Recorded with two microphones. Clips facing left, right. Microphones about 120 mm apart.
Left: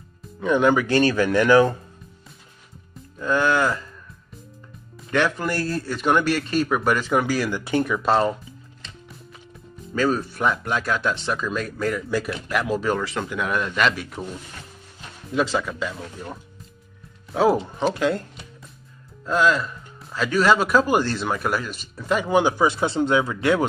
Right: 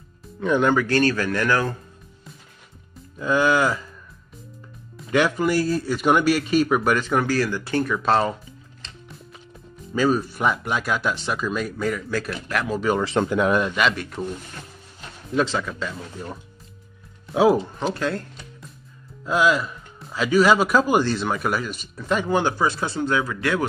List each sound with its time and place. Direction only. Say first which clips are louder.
0.4 s speech: left 1 dB; centre (ahead or behind)
0.8 s speech: left 2 dB; 15° left (ahead or behind)
3.2 s speech: right 1 dB; 5° right (ahead or behind)
4.9 s speech: right 2 dB; 5° right (ahead or behind); by 7.9 s 15° left (ahead or behind)
7.9 s speech: even; centre (ahead or behind)
9.9 s speech: right 1 dB; 5° right (ahead or behind)
13.0 s speech: right 6 dB; 30° right (ahead or behind)
13.7 s speech: even; centre (ahead or behind)
15.3 s speech: even; 5° left (ahead or behind)
17.3 s speech: right 2 dB; 5° right (ahead or behind)
17.7 s speech: left 3 dB; 10° left (ahead or behind)
19.2 s speech: even; 10° right (ahead or behind); by 23.6 s 25° left (ahead or behind)